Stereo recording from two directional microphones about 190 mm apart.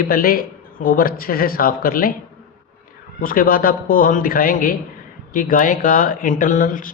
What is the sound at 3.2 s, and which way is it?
Speech, 50° left (ahead or behind).